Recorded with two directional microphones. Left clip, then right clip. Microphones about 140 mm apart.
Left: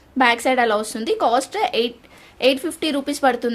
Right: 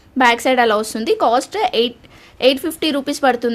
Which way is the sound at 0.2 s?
30° right (ahead or behind).